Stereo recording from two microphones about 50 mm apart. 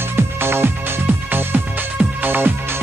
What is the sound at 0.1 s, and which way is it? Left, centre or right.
Music, right.